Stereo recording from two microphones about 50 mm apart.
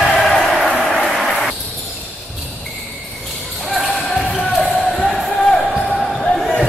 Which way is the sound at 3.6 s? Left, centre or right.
Centre.